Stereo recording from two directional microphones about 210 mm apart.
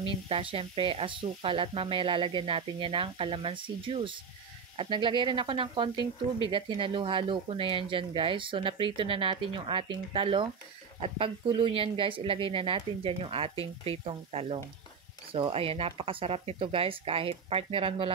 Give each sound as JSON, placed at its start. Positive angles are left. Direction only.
{"t": 0.0, "sound": "speech", "side_deg": -25}